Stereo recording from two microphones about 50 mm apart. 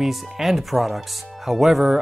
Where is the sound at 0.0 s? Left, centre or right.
Centre.